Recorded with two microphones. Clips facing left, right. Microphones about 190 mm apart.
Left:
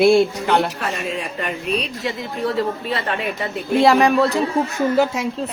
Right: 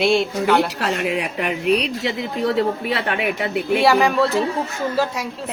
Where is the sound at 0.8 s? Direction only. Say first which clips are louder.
Right 3 dB; 75° right (ahead or behind).